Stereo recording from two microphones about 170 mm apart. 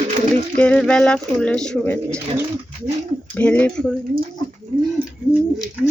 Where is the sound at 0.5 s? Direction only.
10° left (ahead or behind).